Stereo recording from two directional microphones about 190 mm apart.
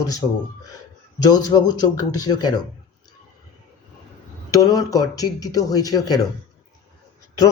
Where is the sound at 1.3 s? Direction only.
20° left (ahead or behind).